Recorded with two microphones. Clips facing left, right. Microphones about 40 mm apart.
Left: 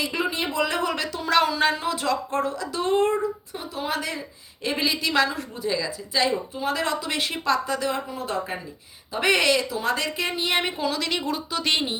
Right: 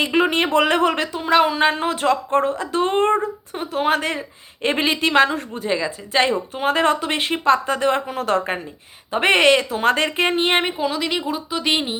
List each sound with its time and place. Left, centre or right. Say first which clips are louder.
0.0 s a sound: right 9 dB; right
0.3 s a woman's voice: right 8 dB; right
9.1 s speech: right 6 dB; right
10.7 s speech: right 4 dB; centre